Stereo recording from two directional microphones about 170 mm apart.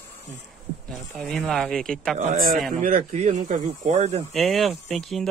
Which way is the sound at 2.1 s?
55° right (ahead or behind).